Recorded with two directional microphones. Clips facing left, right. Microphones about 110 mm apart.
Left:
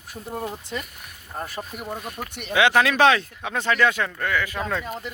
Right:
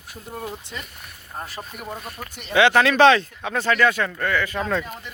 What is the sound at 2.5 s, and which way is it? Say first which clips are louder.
Speech: right 2 dB; 10° left (ahead or behind).